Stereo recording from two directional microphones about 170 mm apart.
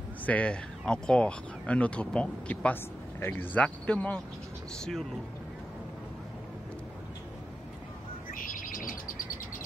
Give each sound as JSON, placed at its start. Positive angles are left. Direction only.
{"t": 0.2, "sound": "speech", "side_deg": 10}
{"t": 8.3, "sound": "bird", "side_deg": 55}